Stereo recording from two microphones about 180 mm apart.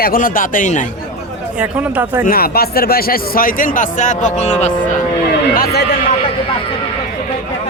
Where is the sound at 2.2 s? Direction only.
55° left (ahead or behind); by 4.7 s 40° left (ahead or behind).